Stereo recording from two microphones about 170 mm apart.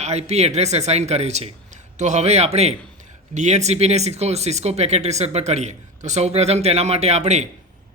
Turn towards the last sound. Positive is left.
turn(degrees=-40)  # may be behind; listen again after turning